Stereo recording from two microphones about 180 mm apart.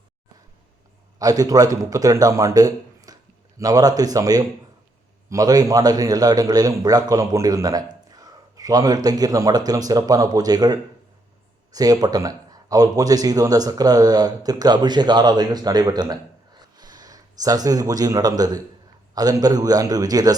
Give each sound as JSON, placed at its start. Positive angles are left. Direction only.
{"t": 1.2, "sound": "a man's voice", "side_deg": -20}
{"t": 16.6, "sound": "a sound", "side_deg": -20}
{"t": 19.1, "sound": "speech", "side_deg": -20}